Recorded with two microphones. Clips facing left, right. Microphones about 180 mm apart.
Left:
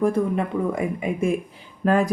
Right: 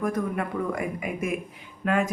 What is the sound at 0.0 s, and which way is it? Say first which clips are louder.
Speech: left 6 dB; 25° left (ahead or behind).